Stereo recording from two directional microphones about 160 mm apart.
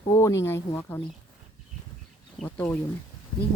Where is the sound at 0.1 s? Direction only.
20° left (ahead or behind).